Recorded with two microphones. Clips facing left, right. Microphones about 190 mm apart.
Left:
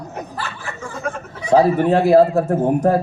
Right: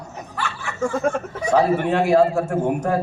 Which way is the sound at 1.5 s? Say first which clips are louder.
Left 4 dB; 35° left (ahead or behind).